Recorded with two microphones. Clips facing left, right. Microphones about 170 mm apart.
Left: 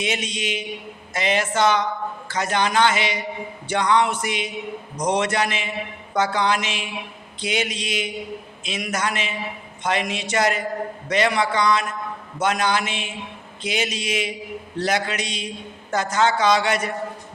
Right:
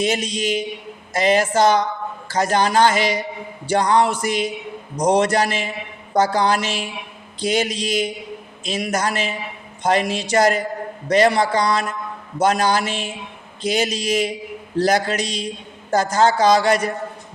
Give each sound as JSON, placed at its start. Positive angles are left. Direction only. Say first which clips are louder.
{"t": 0.0, "sound": "speech", "louder": "right 5 dB", "side_deg": -40}